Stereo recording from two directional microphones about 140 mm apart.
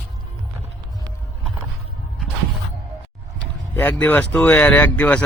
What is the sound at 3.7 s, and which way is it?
Speech, 15° left (ahead or behind).